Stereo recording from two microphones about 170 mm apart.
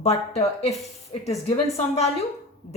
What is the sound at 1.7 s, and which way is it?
Speech, 35° left (ahead or behind).